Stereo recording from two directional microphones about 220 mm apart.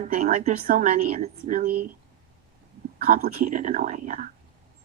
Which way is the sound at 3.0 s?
40° right (ahead or behind).